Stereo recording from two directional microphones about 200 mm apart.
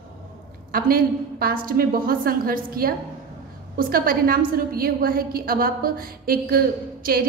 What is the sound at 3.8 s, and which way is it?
A woman's voice, 45° right (ahead or behind).